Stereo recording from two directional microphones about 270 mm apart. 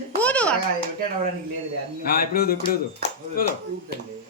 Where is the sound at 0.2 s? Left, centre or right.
Centre.